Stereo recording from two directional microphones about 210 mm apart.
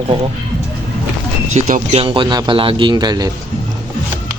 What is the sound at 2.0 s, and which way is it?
Speech, 25° right (ahead or behind).